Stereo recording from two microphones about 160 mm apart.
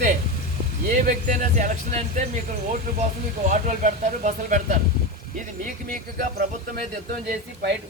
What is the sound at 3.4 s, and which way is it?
Speech, 50° right (ahead or behind).